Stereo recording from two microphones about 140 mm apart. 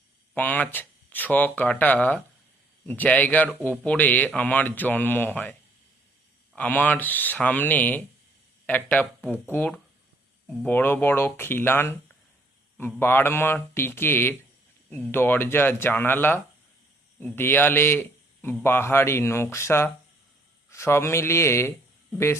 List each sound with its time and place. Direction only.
0.3 s a man's voice: 10° left (ahead or behind)
6.6 s a man's voice: 10° left (ahead or behind)